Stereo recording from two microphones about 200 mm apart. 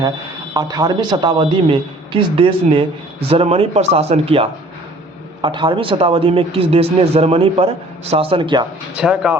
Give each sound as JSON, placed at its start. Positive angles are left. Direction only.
{"t": 0.5, "sound": "speech", "side_deg": -20}
{"t": 9.0, "sound": "speech", "side_deg": -5}